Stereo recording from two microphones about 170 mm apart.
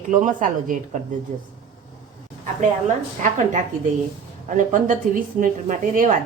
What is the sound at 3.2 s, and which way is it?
A woman's voice, 45° right (ahead or behind).